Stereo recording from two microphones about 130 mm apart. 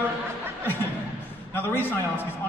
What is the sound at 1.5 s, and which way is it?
Speech, 15° left (ahead or behind).